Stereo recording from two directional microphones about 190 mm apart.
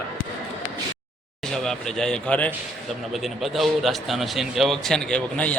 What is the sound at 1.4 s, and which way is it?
A man's voice, centre (ahead or behind).